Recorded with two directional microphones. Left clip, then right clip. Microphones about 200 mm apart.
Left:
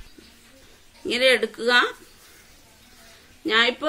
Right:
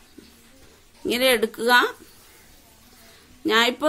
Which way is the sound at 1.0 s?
55° right (ahead or behind).